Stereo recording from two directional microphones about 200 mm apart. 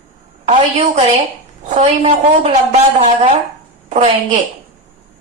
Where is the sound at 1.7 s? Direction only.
30° right (ahead or behind).